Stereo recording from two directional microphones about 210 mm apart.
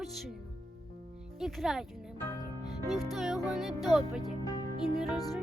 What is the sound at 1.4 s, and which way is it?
Speech, centre (ahead or behind).